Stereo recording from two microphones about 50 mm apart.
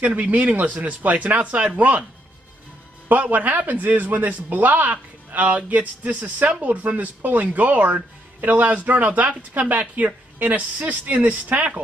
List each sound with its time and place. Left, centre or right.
0.0 s speech: right
3.1 s speech: right